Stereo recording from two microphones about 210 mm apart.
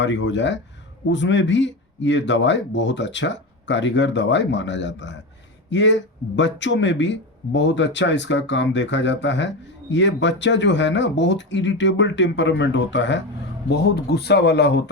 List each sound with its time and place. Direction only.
0.0 s speech: 60° left (ahead or behind)